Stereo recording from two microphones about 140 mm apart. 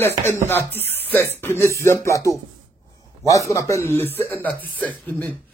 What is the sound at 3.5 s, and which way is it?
Music, 20° left (ahead or behind).